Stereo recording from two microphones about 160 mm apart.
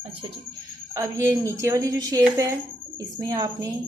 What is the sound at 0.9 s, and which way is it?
Speech, 20° right (ahead or behind).